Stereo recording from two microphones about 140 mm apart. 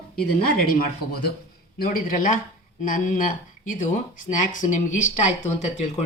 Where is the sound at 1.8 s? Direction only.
85° left.